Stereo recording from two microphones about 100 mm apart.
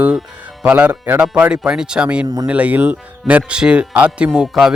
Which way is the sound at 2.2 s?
35° right (ahead or behind).